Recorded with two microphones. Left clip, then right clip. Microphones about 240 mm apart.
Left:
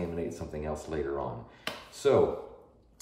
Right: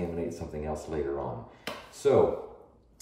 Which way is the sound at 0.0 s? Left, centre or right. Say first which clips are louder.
Right 1 dB; centre.